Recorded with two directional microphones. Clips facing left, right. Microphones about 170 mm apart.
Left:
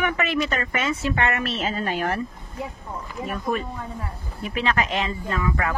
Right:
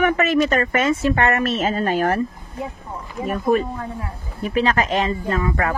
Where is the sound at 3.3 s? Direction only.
40° right (ahead or behind).